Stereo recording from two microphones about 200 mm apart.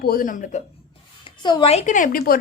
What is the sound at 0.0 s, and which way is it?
Speech, 45° left (ahead or behind).